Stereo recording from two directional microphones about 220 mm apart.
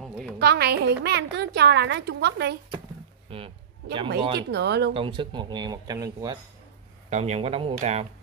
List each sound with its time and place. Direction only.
0.4 s a woman's voice: 45° right (ahead or behind)
3.3 s a sound: 25° right (ahead or behind)
4.4 s a woman's voice: 50° right (ahead or behind)
4.9 s speech: 20° right (ahead or behind)
7.1 s speech: 30° right (ahead or behind)